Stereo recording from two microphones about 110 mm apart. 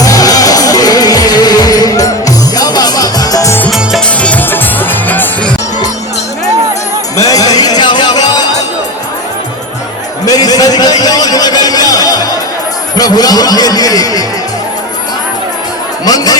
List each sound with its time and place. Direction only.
0.0 s music: 35° left (ahead or behind)
3.7 s music: centre (ahead or behind)
4.2 s music: 15° left (ahead or behind)
7.2 s music: 35° left (ahead or behind)
10.2 s a sound: 35° left (ahead or behind)
16.0 s music: 35° left (ahead or behind)